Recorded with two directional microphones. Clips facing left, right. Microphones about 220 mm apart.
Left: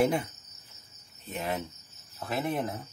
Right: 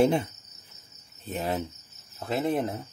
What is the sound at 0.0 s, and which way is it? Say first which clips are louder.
Cricket: right 4 dB; 25° right (ahead or behind).